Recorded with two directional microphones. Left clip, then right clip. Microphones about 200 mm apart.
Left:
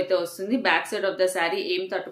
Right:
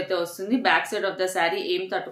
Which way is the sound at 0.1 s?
5° left (ahead or behind).